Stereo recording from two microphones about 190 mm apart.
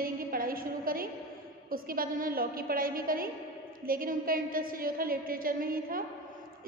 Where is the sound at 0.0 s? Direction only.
50° right (ahead or behind).